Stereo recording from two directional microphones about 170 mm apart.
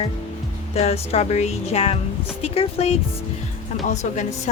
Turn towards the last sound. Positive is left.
turn(degrees=45)  # may be behind; listen again after turning